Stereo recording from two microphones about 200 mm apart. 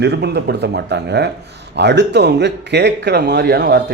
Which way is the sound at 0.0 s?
55° right (ahead or behind).